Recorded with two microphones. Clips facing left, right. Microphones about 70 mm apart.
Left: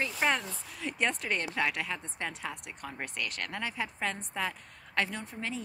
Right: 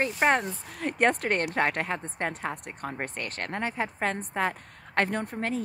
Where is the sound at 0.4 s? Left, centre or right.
Right.